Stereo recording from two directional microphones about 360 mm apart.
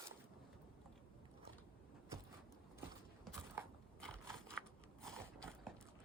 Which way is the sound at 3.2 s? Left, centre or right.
Centre.